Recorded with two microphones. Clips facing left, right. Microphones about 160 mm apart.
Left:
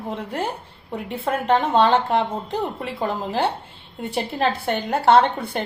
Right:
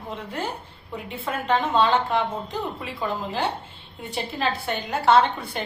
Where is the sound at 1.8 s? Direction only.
60° left (ahead or behind).